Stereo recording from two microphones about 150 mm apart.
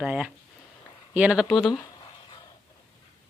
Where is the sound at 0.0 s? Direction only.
5° right (ahead or behind).